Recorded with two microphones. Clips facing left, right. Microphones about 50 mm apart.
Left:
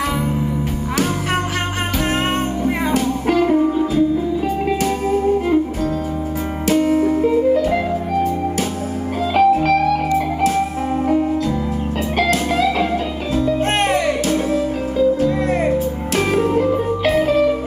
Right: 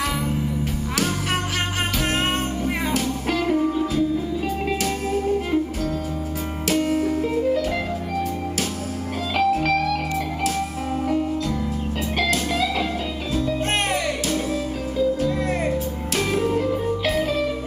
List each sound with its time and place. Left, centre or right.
2.6 s music: left
6.7 s music: centre
9.3 s music: left